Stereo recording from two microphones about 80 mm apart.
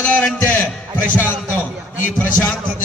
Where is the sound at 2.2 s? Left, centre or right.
Left.